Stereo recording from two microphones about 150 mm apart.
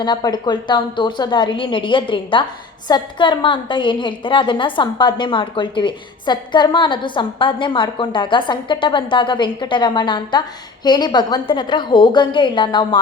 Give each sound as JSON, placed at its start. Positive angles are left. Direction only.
{"t": 0.0, "sound": "a woman's voice", "side_deg": 30}